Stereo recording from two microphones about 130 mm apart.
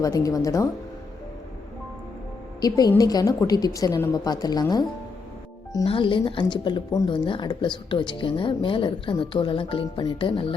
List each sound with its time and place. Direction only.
0.0 s a woman's voice: 25° left (ahead or behind)
2.6 s a woman's voice: 30° left (ahead or behind)
5.8 s speech: 40° left (ahead or behind)